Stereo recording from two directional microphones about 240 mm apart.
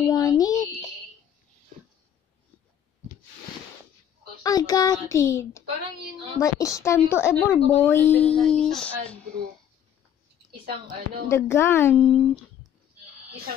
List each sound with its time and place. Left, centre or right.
0.1 s a sound: centre
4.4 s a woman's voice: centre
10.5 s speech: right
11.2 s a woman's voice: centre